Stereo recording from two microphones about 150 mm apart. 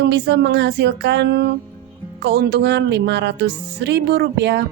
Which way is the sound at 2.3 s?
90° right.